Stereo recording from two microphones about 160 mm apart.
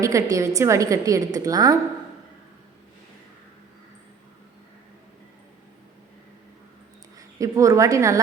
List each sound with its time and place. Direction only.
0.0 s a woman's voice: 20° right (ahead or behind)
7.2 s a woman's voice: 20° right (ahead or behind)